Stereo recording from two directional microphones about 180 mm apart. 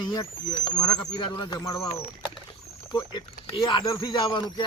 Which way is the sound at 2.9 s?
25° left (ahead or behind).